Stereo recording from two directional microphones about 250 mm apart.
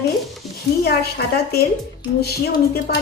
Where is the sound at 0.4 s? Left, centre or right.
Centre.